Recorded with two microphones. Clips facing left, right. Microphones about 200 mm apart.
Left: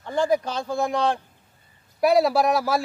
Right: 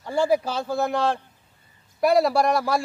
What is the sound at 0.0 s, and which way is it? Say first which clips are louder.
A man's voice: right 1 dB; 10° right (ahead or behind).